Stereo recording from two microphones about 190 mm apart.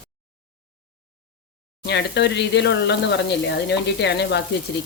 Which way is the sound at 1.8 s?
65° left (ahead or behind).